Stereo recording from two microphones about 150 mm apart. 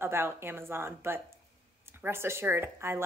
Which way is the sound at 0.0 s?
15° right (ahead or behind).